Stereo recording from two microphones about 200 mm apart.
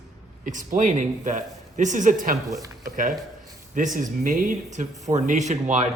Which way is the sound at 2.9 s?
40° right (ahead or behind).